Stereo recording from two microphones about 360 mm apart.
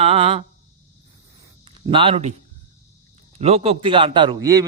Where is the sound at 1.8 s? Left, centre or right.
Centre.